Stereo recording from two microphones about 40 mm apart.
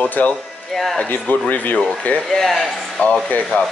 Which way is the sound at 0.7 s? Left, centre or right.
Centre.